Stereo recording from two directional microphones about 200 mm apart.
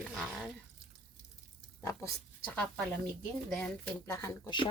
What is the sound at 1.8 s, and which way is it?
Speech, 15° left (ahead or behind).